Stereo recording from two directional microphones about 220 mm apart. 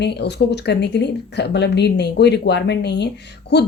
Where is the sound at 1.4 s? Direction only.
50° left (ahead or behind).